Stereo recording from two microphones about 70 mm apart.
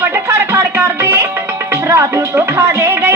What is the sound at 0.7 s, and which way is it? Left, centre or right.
Music, right.